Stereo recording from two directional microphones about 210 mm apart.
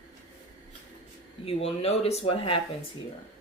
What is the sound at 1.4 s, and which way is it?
Speech, 30° left (ahead or behind).